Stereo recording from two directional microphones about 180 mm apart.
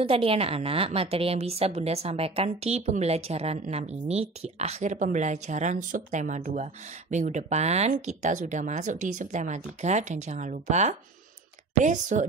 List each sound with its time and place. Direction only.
0.0 s a woman's voice: 30° right (ahead or behind)